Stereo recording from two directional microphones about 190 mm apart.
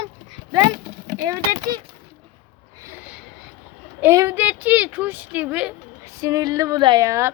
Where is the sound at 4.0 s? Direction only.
15° right (ahead or behind).